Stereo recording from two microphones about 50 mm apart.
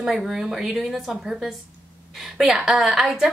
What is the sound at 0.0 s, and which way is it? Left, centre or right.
A woman's voice, centre.